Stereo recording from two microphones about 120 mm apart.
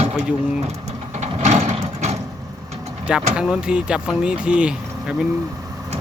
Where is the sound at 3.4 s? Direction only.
10° right (ahead or behind).